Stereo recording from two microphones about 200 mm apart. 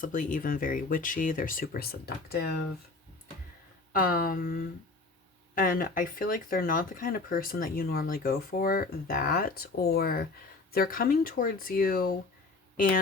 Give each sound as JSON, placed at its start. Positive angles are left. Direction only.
{"t": 0.0, "sound": "speech", "side_deg": 40}
{"t": 3.9, "sound": "speech", "side_deg": 45}